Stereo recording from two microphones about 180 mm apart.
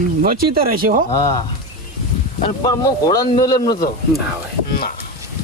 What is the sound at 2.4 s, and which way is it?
Speech, 20° left (ahead or behind).